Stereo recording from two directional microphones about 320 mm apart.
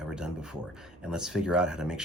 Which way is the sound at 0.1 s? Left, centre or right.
Centre.